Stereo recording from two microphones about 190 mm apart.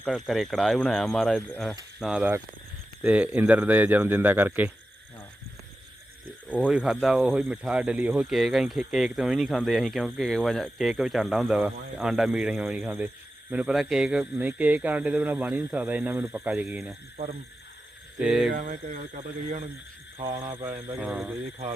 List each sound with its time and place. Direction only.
0.1 s speech: centre (ahead or behind)
6.6 s speech: 5° right (ahead or behind)
18.2 s speech: centre (ahead or behind)
18.5 s speech: 45° right (ahead or behind)
20.4 s speech: 25° right (ahead or behind)
21.0 s speech: 5° right (ahead or behind)